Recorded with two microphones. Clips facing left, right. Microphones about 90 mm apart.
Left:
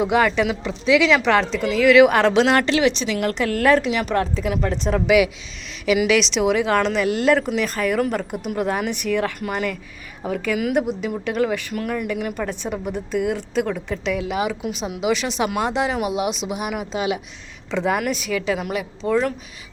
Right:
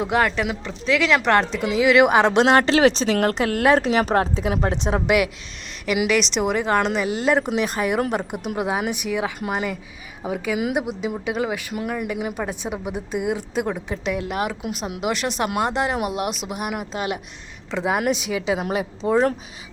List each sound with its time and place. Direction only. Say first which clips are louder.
0.0 s speech: left 3 dB; centre (ahead or behind)
2.4 s a woman's voice: right 2 dB; 25° right (ahead or behind)
5.8 s speech: left 3 dB; 5° right (ahead or behind)
6.7 s a woman's voice: left 1 dB; 15° right (ahead or behind)
7.3 s a woman's voice: even; 20° right (ahead or behind)
16.0 s speech: left 3 dB; 50° right (ahead or behind)
16.6 s a woman's voice: left 2 dB; 5° right (ahead or behind)
18.0 s a woman's voice: right 1 dB; 20° right (ahead or behind)